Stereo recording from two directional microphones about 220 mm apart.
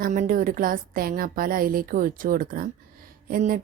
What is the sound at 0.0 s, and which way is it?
Speech, 35° right (ahead or behind).